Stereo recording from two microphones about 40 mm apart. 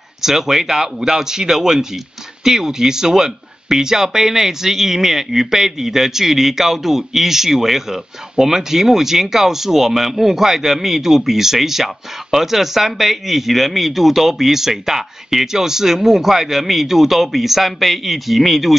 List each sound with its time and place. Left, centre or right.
0.2 s speech: centre